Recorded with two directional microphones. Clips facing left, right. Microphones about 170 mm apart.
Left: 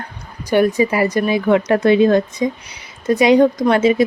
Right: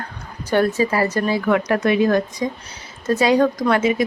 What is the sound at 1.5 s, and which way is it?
Speech, 25° left (ahead or behind).